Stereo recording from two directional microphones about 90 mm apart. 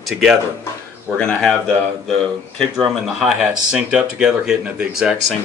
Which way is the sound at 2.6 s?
Centre (ahead or behind).